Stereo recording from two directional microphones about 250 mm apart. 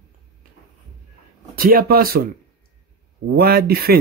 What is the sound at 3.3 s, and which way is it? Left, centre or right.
Speech, right.